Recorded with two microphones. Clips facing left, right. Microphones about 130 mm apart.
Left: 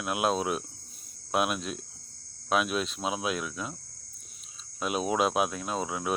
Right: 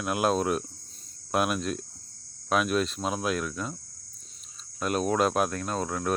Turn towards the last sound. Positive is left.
turn(degrees=5)  # may be behind; listen again after turning